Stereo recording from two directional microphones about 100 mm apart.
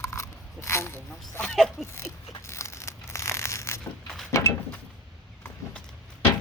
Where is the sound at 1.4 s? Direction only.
5° left (ahead or behind).